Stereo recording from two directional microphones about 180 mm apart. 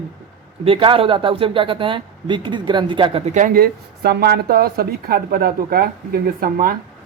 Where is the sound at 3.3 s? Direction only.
50° right (ahead or behind).